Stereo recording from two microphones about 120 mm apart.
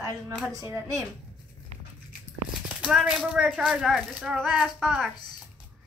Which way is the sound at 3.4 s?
5° right (ahead or behind).